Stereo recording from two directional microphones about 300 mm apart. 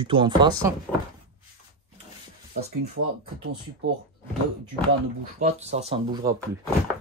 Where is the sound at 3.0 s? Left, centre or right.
Right.